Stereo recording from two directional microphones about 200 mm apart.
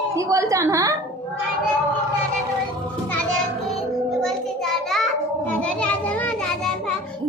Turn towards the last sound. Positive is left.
turn(degrees=5)  # may be behind; listen again after turning